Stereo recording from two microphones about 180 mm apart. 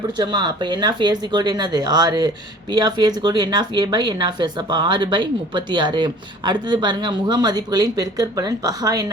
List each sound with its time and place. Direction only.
0.2 s speech: 25° right (ahead or behind)